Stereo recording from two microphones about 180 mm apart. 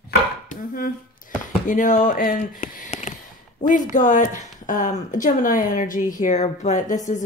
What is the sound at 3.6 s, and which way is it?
A woman's voice, 45° left (ahead or behind).